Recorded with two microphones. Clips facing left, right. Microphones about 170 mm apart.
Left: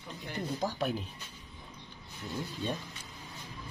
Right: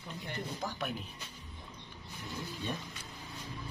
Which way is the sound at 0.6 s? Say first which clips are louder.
Left 7 dB; 35° left (ahead or behind).